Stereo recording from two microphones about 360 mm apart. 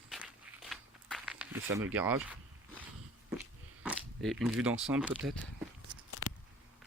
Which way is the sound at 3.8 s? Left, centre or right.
Centre.